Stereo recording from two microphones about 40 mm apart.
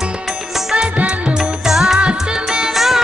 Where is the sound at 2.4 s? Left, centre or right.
Centre.